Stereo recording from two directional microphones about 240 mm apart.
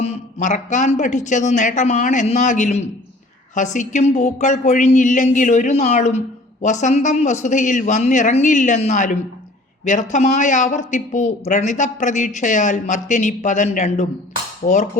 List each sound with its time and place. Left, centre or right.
0.0 s speech: left